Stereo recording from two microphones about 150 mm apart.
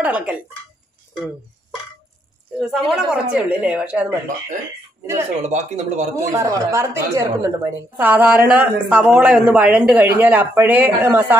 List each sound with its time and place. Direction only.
0.0 s a woman's voice: 10° right (ahead or behind)
2.6 s a woman's voice: centre (ahead or behind)
5.4 s speech: 50° right (ahead or behind)
6.3 s a woman's voice: 20° right (ahead or behind)